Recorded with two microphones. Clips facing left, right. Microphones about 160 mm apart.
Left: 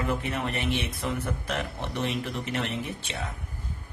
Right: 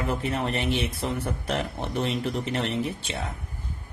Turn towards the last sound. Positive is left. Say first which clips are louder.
# right 5 dB
turn(degrees=-30)  # may be behind; listen again after turning